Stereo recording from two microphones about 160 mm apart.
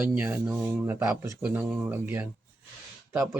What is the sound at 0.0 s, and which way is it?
Speech, 15° right (ahead or behind).